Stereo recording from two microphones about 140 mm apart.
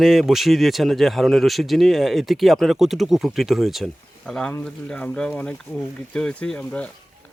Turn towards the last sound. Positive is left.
turn(degrees=10)  # may be behind; listen again after turning